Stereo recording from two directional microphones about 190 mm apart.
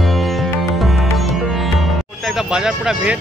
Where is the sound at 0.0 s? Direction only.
Centre (ahead or behind).